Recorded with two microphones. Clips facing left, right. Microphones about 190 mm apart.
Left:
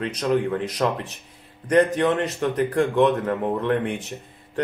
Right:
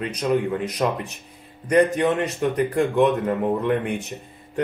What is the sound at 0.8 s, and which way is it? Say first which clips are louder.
Speech: even; 15° right (ahead or behind).